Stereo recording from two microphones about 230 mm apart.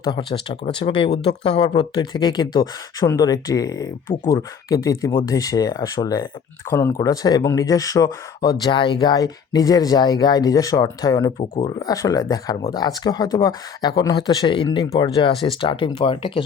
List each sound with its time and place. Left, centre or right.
0.0 s speech: centre